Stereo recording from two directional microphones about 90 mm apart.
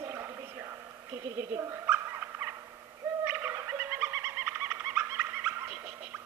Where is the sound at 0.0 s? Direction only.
30° right (ahead or behind).